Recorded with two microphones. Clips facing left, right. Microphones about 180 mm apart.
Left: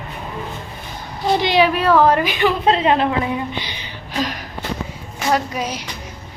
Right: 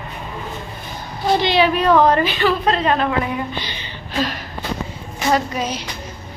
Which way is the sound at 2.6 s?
20° left (ahead or behind).